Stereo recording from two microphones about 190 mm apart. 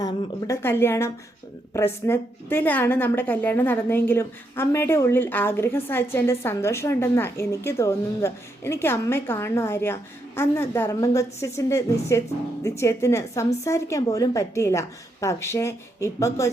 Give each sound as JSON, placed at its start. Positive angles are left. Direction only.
{"t": 0.0, "sound": "a woman's voice", "side_deg": 15}